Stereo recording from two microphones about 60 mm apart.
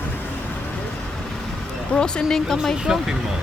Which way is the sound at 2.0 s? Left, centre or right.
Centre.